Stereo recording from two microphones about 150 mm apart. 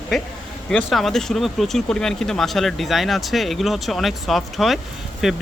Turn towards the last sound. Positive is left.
turn(degrees=0)  # may be behind; listen again after turning